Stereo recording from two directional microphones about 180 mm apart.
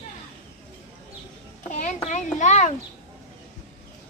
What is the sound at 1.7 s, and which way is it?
A child's voice, 40° left (ahead or behind).